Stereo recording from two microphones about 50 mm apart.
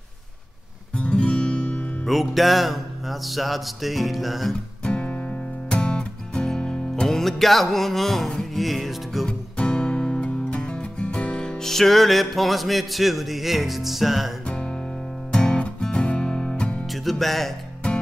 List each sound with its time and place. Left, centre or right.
0.9 s music: left
2.0 s music: centre
4.8 s music: left
7.1 s music: centre
9.6 s music: centre
14.4 s music: centre
16.8 s music: centre